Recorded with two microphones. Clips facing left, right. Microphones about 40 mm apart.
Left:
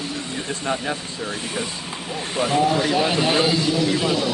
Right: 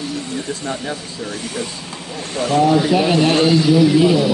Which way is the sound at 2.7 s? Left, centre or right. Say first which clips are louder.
Right 5 dB; centre.